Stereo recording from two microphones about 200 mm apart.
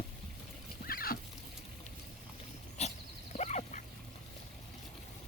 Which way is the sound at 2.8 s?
35° left (ahead or behind).